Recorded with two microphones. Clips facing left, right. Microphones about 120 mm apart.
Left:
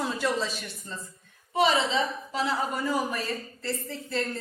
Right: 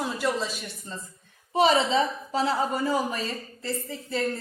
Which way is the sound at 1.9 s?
35° right (ahead or behind).